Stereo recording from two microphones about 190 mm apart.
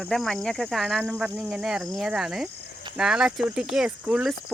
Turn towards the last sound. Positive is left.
turn(degrees=-5)  # may be behind; listen again after turning